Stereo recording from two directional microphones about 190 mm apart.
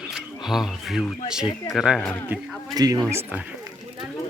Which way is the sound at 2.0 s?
10° left (ahead or behind).